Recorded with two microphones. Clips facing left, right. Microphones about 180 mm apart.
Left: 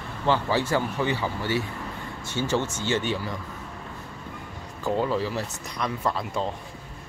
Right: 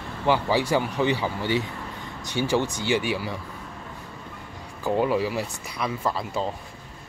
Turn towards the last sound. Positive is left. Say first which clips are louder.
# even
turn(degrees=0)  # may be behind; listen again after turning